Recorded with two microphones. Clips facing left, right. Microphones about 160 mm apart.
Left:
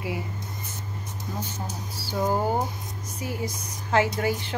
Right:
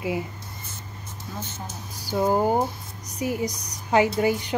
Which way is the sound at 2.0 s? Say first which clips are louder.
Right 4 dB; 15° right (ahead or behind).